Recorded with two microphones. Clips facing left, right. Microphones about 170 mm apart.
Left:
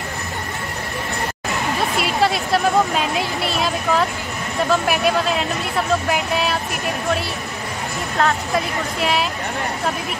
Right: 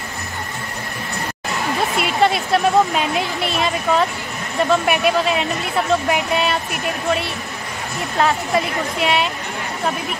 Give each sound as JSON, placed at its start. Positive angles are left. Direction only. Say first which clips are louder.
{"t": 2.0, "sound": "a woman's voice", "louder": "right 2 dB", "side_deg": 0}